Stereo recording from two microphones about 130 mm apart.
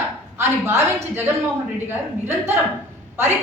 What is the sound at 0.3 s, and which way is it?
Speech, 20° right (ahead or behind).